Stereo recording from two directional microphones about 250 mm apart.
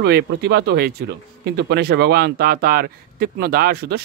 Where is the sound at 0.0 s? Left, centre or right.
Right.